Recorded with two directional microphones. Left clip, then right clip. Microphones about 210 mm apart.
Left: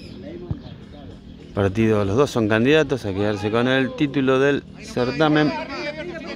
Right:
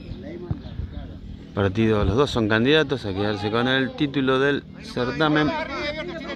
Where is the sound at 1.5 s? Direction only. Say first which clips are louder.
Left 2 dB; 5° left (ahead or behind).